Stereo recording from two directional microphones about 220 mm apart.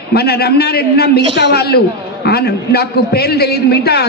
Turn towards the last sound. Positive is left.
turn(degrees=45)  # may be behind; listen again after turning